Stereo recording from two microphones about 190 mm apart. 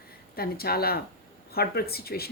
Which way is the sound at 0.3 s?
55° left (ahead or behind).